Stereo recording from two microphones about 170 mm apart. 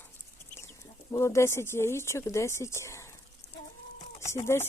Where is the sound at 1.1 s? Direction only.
15° left (ahead or behind).